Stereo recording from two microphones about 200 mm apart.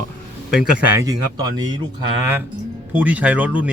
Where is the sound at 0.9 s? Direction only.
20° right (ahead or behind).